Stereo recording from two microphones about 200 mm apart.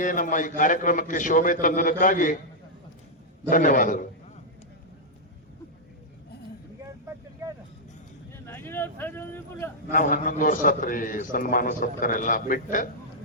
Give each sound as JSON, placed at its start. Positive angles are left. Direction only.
{"t": 0.0, "sound": "a man's voice", "side_deg": 40}
{"t": 3.5, "sound": "a man's voice", "side_deg": 40}
{"t": 7.4, "sound": "vehicle", "side_deg": -15}
{"t": 8.4, "sound": "speech", "side_deg": 10}
{"t": 9.9, "sound": "a man's voice", "side_deg": 45}